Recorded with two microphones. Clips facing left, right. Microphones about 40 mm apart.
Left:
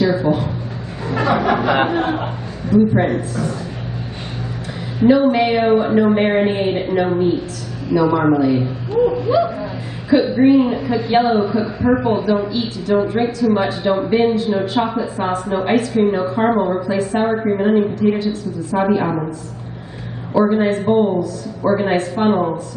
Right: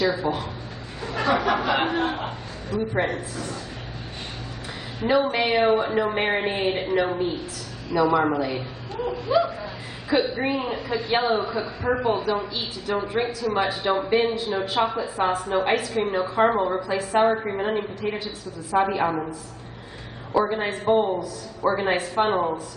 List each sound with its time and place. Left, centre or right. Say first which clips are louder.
0.0 s a sound: left 7 dB; centre
1.0 s chuckle: left 5 dB; centre
5.0 s speech: left 8 dB; centre
20.4 s speech: left 7 dB; centre